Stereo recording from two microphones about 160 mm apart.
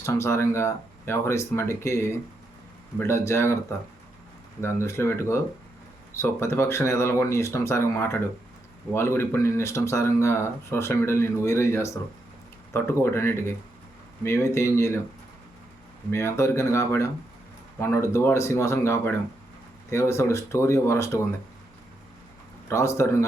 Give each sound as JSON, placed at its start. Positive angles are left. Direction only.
{"t": 0.0, "sound": "speech", "side_deg": 15}
{"t": 16.1, "sound": "speech", "side_deg": 15}
{"t": 22.7, "sound": "speech", "side_deg": 15}